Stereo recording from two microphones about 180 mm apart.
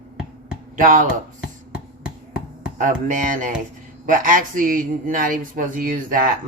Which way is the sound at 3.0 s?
45° right (ahead or behind).